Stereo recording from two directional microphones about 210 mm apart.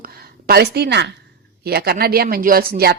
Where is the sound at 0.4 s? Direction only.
50° right (ahead or behind).